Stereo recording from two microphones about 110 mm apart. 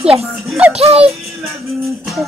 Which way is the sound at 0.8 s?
65° right (ahead or behind).